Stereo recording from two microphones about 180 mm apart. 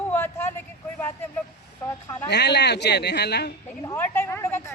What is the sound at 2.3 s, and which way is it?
A man's voice, 70° left (ahead or behind).